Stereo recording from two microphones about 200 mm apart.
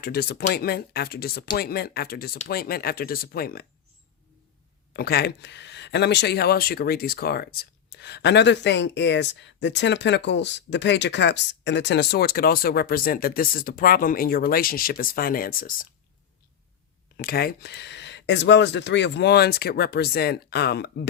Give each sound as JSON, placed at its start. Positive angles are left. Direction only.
{"t": 0.0, "sound": "speech", "side_deg": 50}
{"t": 4.9, "sound": "speech", "side_deg": 50}
{"t": 17.2, "sound": "speech", "side_deg": 50}